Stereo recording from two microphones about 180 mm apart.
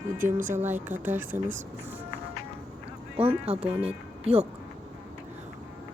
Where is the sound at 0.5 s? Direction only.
10° right (ahead or behind).